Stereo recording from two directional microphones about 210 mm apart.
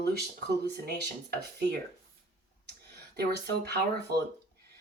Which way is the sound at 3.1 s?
50° right (ahead or behind).